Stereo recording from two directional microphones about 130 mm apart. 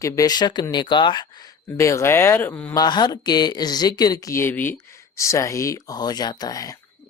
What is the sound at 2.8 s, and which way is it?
Speech, 35° left (ahead or behind).